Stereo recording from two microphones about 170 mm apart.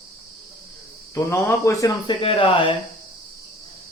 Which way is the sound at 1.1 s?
15° left (ahead or behind).